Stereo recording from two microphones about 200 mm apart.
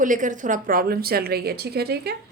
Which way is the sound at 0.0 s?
40° right (ahead or behind).